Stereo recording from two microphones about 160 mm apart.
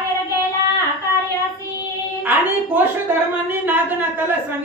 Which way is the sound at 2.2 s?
10° right (ahead or behind).